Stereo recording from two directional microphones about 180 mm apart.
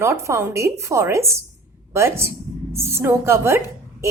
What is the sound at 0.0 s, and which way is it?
A woman's voice, 15° right (ahead or behind).